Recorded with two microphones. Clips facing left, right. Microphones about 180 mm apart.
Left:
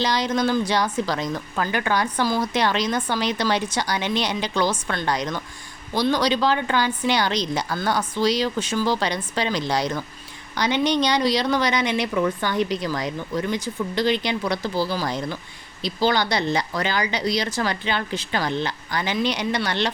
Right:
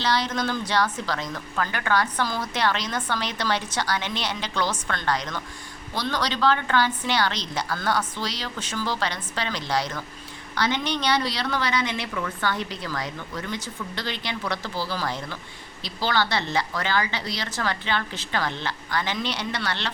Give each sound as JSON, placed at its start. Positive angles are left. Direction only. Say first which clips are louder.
{"t": 0.0, "sound": "a woman's voice", "louder": "left 4 dB", "side_deg": 15}